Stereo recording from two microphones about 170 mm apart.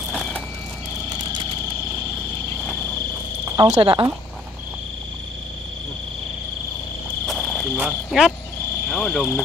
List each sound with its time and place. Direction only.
0.1 s vehicle: 5° left (ahead or behind)
3.5 s speech: 25° right (ahead or behind)
7.2 s cricket: 5° left (ahead or behind)
7.7 s insect: 5° right (ahead or behind)
8.9 s speech: 5° left (ahead or behind)